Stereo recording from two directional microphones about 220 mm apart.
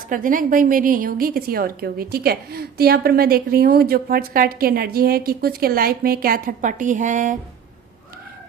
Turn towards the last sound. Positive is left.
turn(degrees=-35)  # may be behind; listen again after turning